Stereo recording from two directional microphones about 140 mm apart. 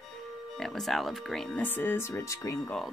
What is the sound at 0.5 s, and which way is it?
Speech, 5° left (ahead or behind).